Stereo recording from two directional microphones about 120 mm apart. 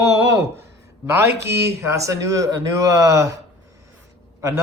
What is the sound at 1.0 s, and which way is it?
A man's voice, 25° right (ahead or behind).